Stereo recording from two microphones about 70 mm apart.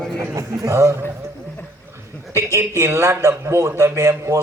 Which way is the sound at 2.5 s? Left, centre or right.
Right.